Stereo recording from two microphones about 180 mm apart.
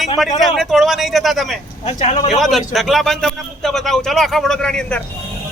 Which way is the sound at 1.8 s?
35° left (ahead or behind).